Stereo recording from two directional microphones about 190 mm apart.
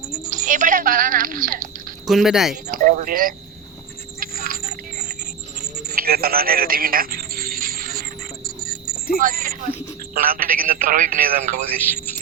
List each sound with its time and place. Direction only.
0.3 s speech: 40° right (ahead or behind)
2.0 s speech: centre (ahead or behind)
2.7 s speech: 45° right (ahead or behind)
4.2 s a sound: 50° right (ahead or behind)
5.9 s music: 55° right (ahead or behind)
9.2 s speech: 50° right (ahead or behind)